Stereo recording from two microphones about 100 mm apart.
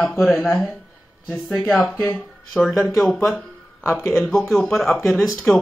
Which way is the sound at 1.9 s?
15° left (ahead or behind).